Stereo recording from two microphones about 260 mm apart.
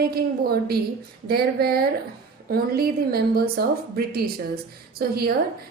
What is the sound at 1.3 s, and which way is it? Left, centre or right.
A woman's voice, right.